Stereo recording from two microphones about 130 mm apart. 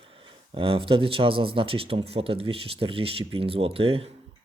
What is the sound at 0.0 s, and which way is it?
Speech, 45° right (ahead or behind).